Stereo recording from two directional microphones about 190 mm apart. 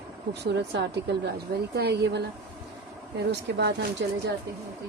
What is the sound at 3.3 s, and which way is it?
Speech, 65° right (ahead or behind).